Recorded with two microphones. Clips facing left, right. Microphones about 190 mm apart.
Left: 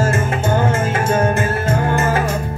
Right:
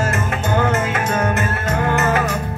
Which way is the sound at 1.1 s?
30° left (ahead or behind).